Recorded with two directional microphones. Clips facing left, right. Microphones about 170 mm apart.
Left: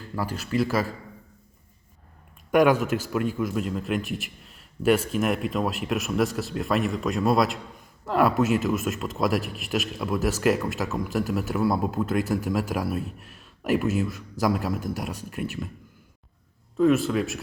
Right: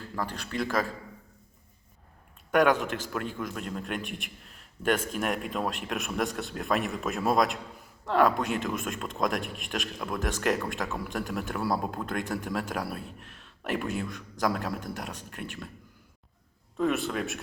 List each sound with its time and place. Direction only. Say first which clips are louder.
0.2 s a man's voice: left 6 dB; 5° left (ahead or behind)
2.5 s a man's voice: left 4 dB; 10° left (ahead or behind)
16.7 s a man's voice: left 7 dB; centre (ahead or behind)